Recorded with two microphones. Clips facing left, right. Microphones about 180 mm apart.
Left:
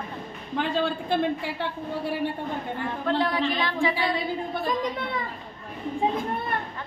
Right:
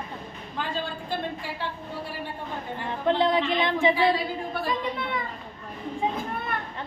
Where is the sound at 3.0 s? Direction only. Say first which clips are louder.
Right 3 dB; 20° right (ahead or behind).